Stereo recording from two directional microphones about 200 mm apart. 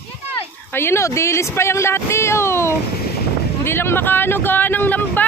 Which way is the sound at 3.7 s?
10° left (ahead or behind).